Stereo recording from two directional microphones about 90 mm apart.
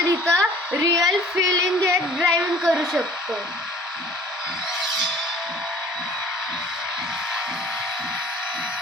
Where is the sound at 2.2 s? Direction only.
5° right (ahead or behind).